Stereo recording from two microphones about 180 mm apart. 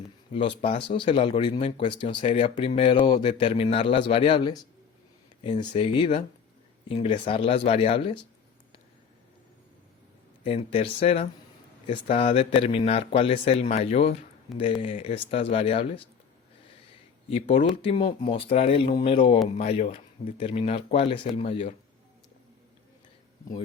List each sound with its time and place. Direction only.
0.3 s a man's voice: 30° left (ahead or behind)
10.4 s speech: 35° left (ahead or behind)
17.2 s speech: 30° left (ahead or behind)